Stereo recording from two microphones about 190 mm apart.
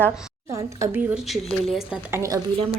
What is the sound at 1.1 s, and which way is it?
Speech, centre (ahead or behind).